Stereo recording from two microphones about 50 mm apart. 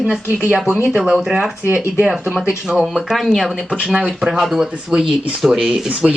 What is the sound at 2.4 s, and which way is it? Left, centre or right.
Speech, centre.